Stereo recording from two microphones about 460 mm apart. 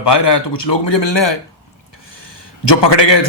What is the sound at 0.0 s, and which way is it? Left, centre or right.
A man's voice, left.